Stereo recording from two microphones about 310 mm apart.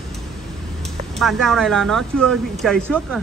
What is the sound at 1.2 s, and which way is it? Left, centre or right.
Speech, centre.